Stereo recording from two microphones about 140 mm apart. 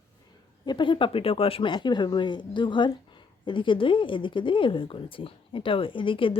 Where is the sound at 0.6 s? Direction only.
35° left (ahead or behind).